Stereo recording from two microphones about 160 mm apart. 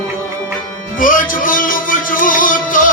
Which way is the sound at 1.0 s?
60° left (ahead or behind).